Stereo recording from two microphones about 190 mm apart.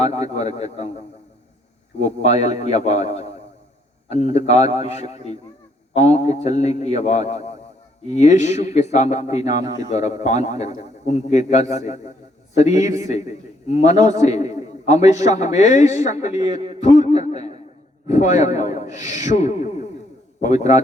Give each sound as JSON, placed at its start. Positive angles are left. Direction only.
{"t": 0.0, "sound": "a man's voice", "side_deg": 35}